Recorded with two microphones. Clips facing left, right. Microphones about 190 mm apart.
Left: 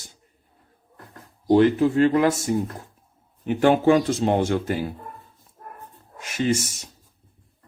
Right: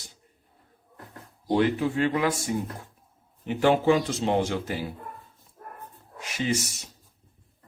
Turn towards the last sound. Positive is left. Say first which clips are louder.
# left 5 dB
turn(degrees=45)  # may be behind; listen again after turning